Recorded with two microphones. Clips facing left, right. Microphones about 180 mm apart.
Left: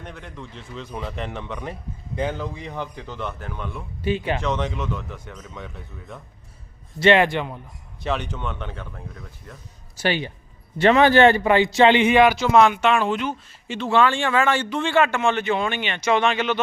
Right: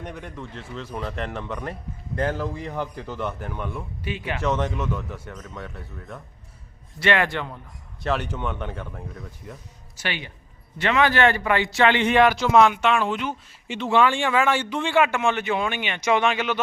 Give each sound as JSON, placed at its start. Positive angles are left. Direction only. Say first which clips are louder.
{"t": 0.0, "sound": "speech", "louder": "right 2 dB", "side_deg": -10}
{"t": 4.0, "sound": "speech", "louder": "left 8 dB", "side_deg": 30}
{"t": 4.4, "sound": "speech", "louder": "right 1 dB", "side_deg": -5}
{"t": 7.0, "sound": "a man's voice", "louder": "left 6 dB", "side_deg": 20}
{"t": 8.0, "sound": "speech", "louder": "right 1 dB", "side_deg": -5}
{"t": 10.0, "sound": "speech", "louder": "left 8 dB", "side_deg": 35}
{"t": 12.0, "sound": "speech", "louder": "left 2 dB", "side_deg": 5}
{"t": 13.7, "sound": "speech", "louder": "left 1 dB", "side_deg": -15}